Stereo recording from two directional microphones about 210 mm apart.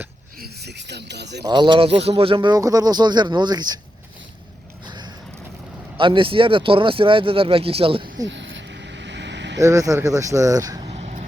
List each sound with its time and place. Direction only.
0.3 s speech: 50° right (ahead or behind)
1.5 s speech: 20° right (ahead or behind)
4.9 s a sound: 20° right (ahead or behind)
6.0 s speech: 25° right (ahead or behind)
8.3 s vehicle: 60° right (ahead or behind)
9.6 s speech: 15° right (ahead or behind); by 11.3 s 30° right (ahead or behind)